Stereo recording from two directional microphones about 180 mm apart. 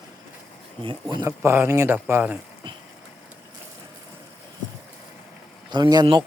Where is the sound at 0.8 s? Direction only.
25° right (ahead or behind).